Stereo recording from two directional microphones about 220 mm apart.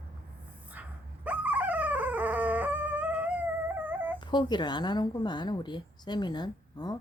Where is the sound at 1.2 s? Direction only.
5° right (ahead or behind).